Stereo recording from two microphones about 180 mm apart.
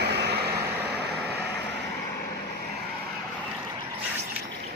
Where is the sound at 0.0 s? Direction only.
70° right (ahead or behind).